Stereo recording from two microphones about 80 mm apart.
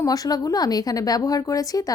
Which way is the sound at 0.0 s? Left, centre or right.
Left.